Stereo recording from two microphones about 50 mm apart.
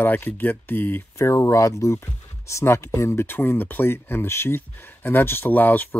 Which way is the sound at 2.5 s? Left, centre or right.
Left.